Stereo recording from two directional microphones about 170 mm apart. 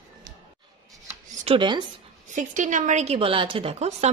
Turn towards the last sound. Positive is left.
turn(degrees=-40)  # may be behind; listen again after turning